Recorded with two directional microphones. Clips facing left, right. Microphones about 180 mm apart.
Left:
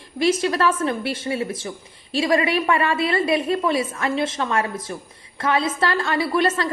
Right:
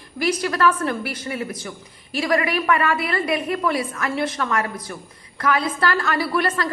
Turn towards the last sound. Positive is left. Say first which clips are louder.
# left 2 dB
turn(degrees=20)  # may be behind; listen again after turning